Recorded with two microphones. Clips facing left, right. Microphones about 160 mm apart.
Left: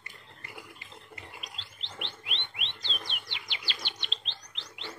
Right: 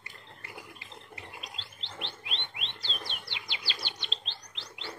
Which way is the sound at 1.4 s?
35° right (ahead or behind).